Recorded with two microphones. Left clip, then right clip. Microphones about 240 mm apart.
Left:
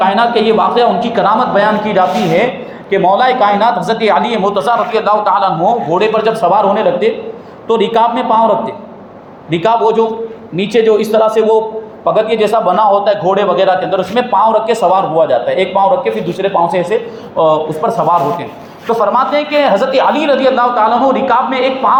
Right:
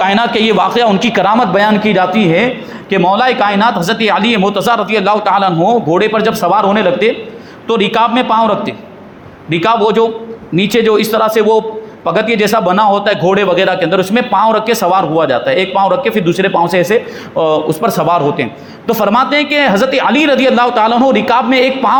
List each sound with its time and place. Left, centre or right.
0.0 s a man's voice: right